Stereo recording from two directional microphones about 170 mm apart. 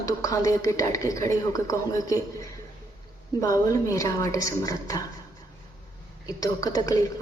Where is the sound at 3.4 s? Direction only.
20° left (ahead or behind).